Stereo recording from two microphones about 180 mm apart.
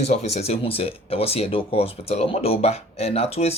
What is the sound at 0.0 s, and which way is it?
Speech, 35° left (ahead or behind).